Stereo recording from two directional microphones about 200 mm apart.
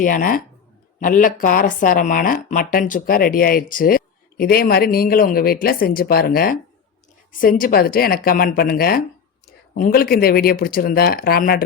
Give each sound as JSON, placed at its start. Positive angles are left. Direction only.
{"t": 0.0, "sound": "speech", "side_deg": 45}